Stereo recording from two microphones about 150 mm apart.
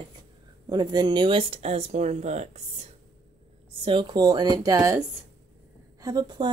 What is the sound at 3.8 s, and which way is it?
Speech, 35° right (ahead or behind).